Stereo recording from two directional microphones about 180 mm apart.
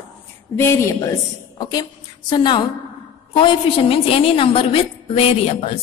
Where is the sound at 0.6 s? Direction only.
15° left (ahead or behind).